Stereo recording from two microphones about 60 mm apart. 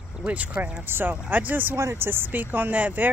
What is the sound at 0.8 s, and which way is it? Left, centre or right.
Speech, right.